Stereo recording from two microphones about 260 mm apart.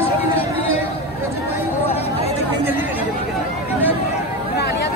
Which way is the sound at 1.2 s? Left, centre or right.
Centre.